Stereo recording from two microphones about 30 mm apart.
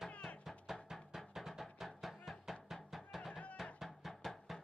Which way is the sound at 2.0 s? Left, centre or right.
Centre.